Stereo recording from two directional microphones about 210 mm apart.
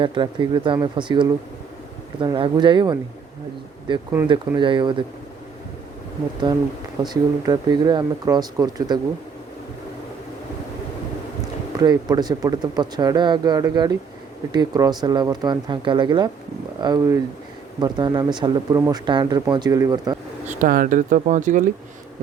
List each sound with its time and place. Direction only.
0.0 s speech: 20° right (ahead or behind)
7.0 s speech: 20° right (ahead or behind)
11.8 s speech: 20° right (ahead or behind)
20.5 s speech: 40° right (ahead or behind)